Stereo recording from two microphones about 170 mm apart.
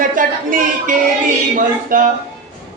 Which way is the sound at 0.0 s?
50° right (ahead or behind).